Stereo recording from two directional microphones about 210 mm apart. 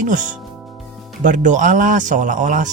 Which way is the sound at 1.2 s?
35° right (ahead or behind).